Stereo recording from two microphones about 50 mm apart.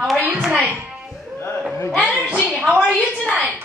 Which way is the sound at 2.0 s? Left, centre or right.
Centre.